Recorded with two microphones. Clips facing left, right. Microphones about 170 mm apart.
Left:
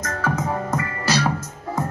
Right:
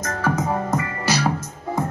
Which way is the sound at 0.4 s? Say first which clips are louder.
Right 2 dB; 20° right (ahead or behind).